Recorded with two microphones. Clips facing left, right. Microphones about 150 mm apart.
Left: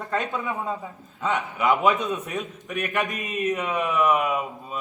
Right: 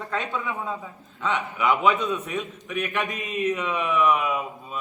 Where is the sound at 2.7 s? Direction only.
45° left (ahead or behind).